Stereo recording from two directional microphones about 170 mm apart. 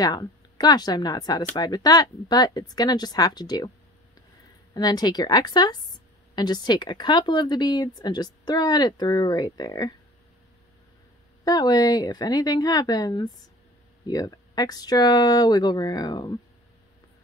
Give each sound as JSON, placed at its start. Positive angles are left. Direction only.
{"t": 0.0, "sound": "speech", "side_deg": 25}
{"t": 4.7, "sound": "speech", "side_deg": 25}
{"t": 11.4, "sound": "speech", "side_deg": 20}